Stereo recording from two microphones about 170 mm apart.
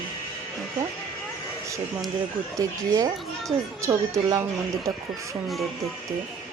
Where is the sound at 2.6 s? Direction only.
20° right (ahead or behind).